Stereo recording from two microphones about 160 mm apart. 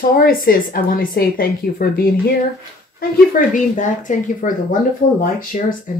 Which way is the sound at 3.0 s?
55° left (ahead or behind).